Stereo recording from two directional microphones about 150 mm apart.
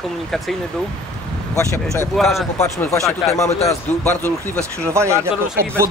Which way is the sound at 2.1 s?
Centre (ahead or behind).